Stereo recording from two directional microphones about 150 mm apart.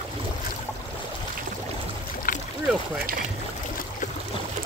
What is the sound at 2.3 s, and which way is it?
Boat, 65° left (ahead or behind).